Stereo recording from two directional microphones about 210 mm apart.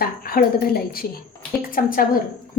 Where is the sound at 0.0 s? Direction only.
45° left (ahead or behind).